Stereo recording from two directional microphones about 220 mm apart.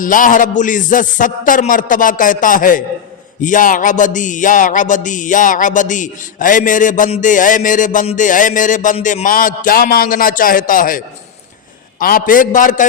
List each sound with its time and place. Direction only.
0.0 s music: 35° left (ahead or behind)